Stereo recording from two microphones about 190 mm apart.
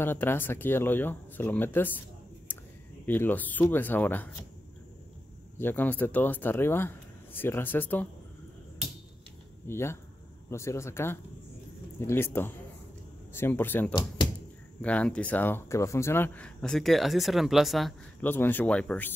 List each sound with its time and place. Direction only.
0.0 s speech: 10° left (ahead or behind)
2.5 s a sound: 10° left (ahead or behind)
3.1 s speech: 10° left (ahead or behind)
5.6 s speech: 10° left (ahead or behind)
9.7 s speech: 15° left (ahead or behind)
18.3 s speech: 10° left (ahead or behind)